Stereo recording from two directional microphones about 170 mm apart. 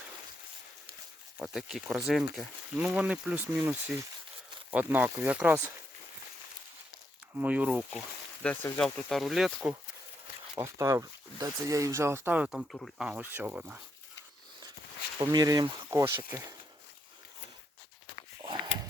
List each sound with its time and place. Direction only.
1.4 s speech: 5° right (ahead or behind)
7.3 s speech: 10° right (ahead or behind)
10.6 s speech: 15° right (ahead or behind)
15.2 s speech: 25° right (ahead or behind)
18.4 s a sound: 25° right (ahead or behind)